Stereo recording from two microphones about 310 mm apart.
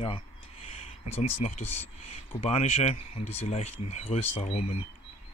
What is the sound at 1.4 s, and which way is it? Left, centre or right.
Speech, left.